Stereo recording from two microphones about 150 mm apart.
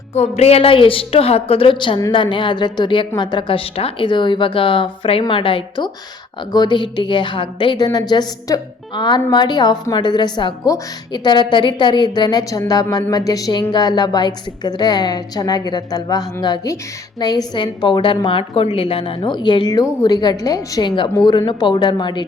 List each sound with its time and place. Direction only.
0.1 s a woman's voice: 45° left (ahead or behind)